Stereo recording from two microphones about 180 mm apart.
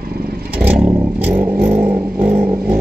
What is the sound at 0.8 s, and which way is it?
Vehicle, 15° right (ahead or behind).